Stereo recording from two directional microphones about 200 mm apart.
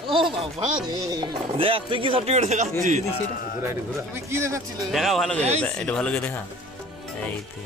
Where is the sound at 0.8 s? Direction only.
20° right (ahead or behind); by 2.7 s 35° right (ahead or behind).